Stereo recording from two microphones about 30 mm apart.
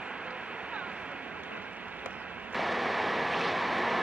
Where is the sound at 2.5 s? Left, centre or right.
Centre.